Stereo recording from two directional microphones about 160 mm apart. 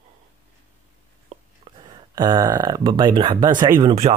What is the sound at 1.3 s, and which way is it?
Speech, 35° right (ahead or behind).